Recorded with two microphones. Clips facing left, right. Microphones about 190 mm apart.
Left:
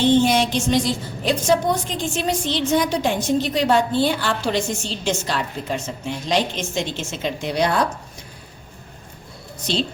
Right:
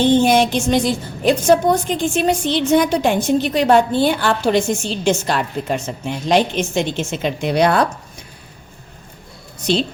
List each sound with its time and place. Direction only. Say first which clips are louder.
0.2 s a woman's voice: right 3 dB; 50° right (ahead or behind)